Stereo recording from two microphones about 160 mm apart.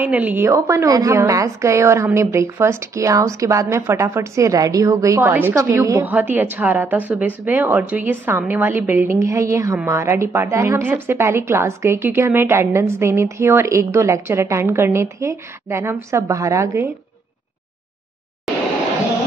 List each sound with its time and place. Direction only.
0.0 s a woman's voice: 10° right (ahead or behind)